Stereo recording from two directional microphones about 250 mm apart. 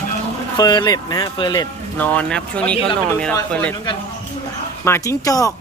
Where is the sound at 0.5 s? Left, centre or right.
Centre.